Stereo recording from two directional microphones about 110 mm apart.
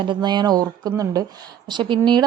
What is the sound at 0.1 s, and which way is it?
A woman's voice, 40° right (ahead or behind).